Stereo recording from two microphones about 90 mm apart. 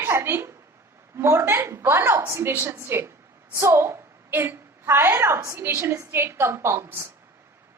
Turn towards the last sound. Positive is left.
turn(degrees=-25)  # may be behind; listen again after turning